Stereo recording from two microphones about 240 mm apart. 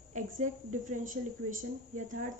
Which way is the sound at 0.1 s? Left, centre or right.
Right.